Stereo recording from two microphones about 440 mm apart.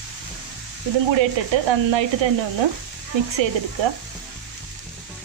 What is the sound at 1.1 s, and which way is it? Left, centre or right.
Speech, right.